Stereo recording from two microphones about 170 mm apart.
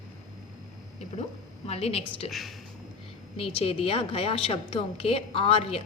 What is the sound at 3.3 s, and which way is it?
A woman's voice, 35° left (ahead or behind).